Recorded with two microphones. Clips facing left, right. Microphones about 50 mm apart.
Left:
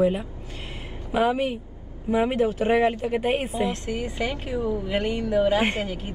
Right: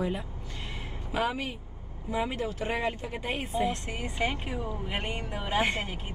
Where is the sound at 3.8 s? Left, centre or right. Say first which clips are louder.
Left 4 dB; right.